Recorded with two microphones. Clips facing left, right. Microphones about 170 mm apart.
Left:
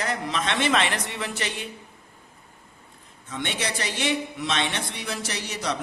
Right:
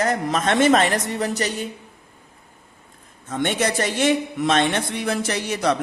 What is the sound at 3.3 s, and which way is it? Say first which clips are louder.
A man's voice: right 8 dB; 50° right (ahead or behind).